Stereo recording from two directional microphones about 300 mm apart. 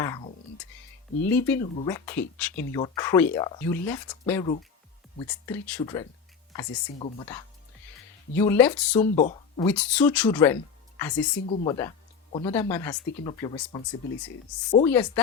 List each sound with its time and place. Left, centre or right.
0.0 s a sound: centre
1.2 s speech: centre
9.1 s speech: left
9.6 s speech: centre
12.5 s speech: centre
14.8 s speech: centre